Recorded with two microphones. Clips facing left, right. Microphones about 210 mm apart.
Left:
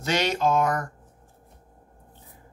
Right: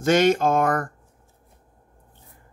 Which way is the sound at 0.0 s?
50° right (ahead or behind).